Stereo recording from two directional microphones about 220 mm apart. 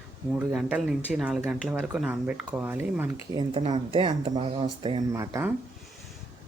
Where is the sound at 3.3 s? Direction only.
25° right (ahead or behind).